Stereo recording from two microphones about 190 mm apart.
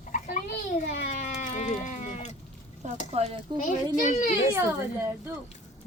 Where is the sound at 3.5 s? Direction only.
40° left (ahead or behind).